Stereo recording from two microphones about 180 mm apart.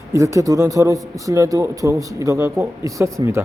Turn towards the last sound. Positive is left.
turn(degrees=-15)  # may be behind; listen again after turning